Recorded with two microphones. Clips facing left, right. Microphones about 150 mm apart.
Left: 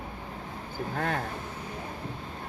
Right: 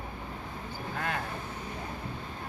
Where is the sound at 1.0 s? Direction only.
45° left (ahead or behind).